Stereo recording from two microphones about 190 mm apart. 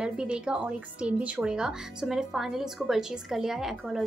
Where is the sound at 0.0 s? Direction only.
5° right (ahead or behind).